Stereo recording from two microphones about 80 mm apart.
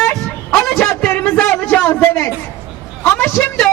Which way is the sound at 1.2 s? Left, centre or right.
Centre.